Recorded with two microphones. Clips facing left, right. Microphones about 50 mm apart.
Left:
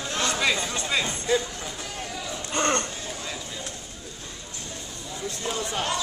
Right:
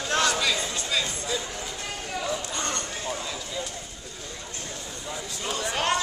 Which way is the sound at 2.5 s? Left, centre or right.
Left.